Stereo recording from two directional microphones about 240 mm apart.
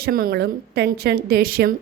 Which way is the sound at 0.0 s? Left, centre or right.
Right.